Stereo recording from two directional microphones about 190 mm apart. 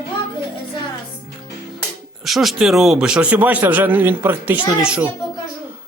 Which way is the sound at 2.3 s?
Centre (ahead or behind).